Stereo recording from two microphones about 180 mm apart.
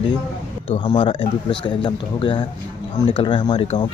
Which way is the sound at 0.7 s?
25° left (ahead or behind).